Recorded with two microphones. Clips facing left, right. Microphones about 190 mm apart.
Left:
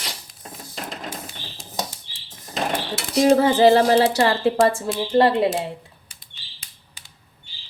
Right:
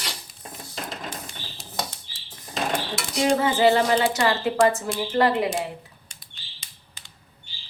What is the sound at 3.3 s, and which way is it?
Speech, 35° left (ahead or behind).